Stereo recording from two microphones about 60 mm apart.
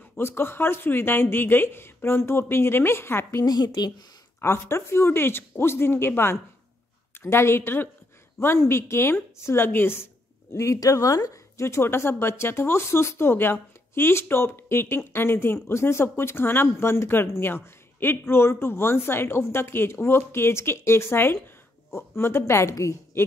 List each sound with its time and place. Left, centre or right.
0.2 s speech: left
3.8 s speech: left
4.4 s speech: left
9.7 s speech: left
10.5 s a woman's voice: left
11.6 s speech: left